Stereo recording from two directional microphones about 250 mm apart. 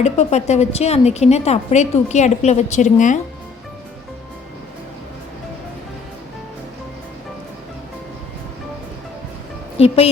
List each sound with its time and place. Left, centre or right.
0.0 s a woman's voice: left
9.7 s a woman's voice: left